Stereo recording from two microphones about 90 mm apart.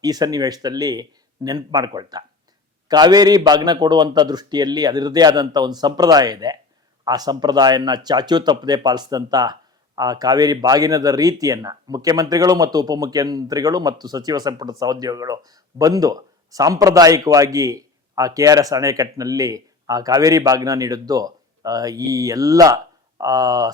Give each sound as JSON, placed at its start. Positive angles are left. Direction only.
{"t": 0.0, "sound": "speech", "side_deg": -45}